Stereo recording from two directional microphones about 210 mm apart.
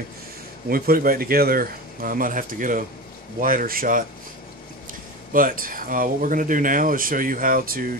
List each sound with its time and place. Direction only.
0.7 s speech: 45° right (ahead or behind)
5.3 s speech: 40° right (ahead or behind)